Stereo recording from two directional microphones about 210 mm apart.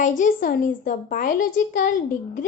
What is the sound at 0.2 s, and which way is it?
A woman's voice, 40° left (ahead or behind).